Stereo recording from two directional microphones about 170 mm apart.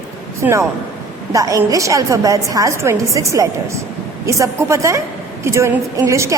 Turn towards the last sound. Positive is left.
turn(degrees=-20)  # may be behind; listen again after turning